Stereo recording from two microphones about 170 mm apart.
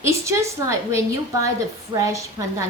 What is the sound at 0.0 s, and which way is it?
A woman's voice, 15° right (ahead or behind).